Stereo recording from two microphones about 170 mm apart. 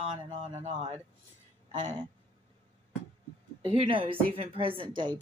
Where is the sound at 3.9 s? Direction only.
30° right (ahead or behind).